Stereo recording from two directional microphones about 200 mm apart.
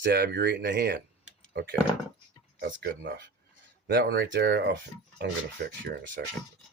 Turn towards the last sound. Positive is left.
turn(degrees=-55)  # may be behind; listen again after turning